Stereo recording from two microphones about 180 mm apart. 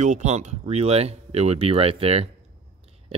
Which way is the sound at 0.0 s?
40° right (ahead or behind).